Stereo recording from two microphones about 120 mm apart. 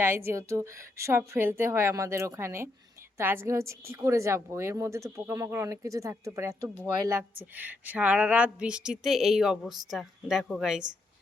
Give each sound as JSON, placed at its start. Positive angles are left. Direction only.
{"t": 0.0, "sound": "a woman's voice", "side_deg": -20}